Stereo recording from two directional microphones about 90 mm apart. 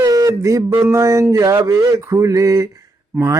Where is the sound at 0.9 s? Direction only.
35° right (ahead or behind).